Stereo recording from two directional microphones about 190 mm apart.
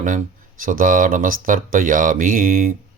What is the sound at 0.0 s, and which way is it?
Speech, 45° right (ahead or behind).